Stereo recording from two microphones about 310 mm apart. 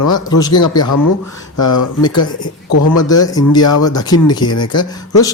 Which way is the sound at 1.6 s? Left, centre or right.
Left.